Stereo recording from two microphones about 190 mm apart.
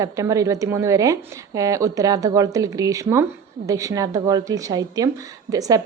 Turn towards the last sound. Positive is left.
turn(degrees=-20)  # may be behind; listen again after turning